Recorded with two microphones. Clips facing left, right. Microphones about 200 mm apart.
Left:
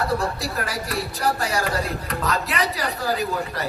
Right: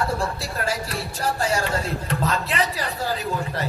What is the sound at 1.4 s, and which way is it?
A man's voice, 30° right (ahead or behind).